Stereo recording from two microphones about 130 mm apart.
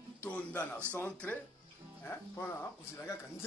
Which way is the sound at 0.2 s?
10° left (ahead or behind).